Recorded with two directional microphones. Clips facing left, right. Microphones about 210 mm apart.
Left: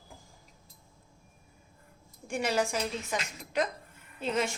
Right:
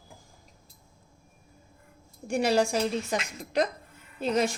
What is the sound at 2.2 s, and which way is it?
A woman's voice, 35° right (ahead or behind).